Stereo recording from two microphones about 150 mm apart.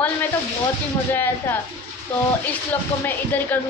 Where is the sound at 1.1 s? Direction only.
15° left (ahead or behind).